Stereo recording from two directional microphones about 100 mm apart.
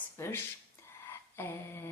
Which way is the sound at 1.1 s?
25° left (ahead or behind).